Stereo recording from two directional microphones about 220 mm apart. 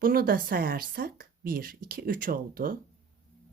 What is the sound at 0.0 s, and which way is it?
Speech, 40° right (ahead or behind).